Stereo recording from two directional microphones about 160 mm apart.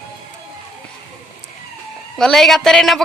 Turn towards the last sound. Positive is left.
turn(degrees=5)  # may be behind; listen again after turning